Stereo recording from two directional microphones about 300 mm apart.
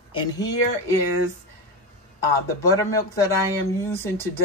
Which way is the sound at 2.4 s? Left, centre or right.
Centre.